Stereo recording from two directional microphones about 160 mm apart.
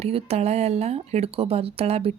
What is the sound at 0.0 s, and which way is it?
Speech, 40° right (ahead or behind).